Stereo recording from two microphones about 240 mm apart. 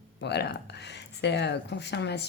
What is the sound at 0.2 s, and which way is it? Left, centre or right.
Speech, left.